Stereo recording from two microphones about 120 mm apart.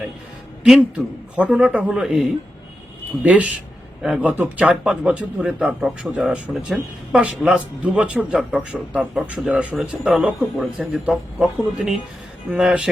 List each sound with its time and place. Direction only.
0.6 s speech: 5° right (ahead or behind)
3.2 s speech: 10° right (ahead or behind)